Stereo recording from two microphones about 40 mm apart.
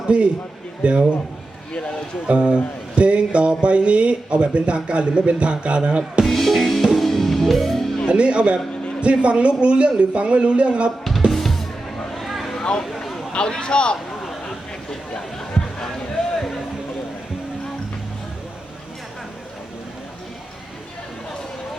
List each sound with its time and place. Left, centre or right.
0.1 s music: right
1.7 s a man's voice: left
2.2 s music: right
6.2 s drum: centre
6.9 s music: centre
8.1 s music: right
11.3 s music: centre
12.1 s vehicle: centre
12.8 s a sound: centre
13.3 s a man's voice: left
15.8 s music: centre